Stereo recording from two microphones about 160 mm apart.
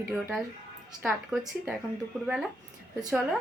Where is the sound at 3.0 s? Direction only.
20° right (ahead or behind).